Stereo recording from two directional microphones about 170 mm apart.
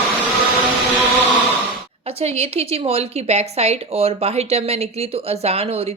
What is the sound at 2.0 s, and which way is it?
Speech, 35° right (ahead or behind).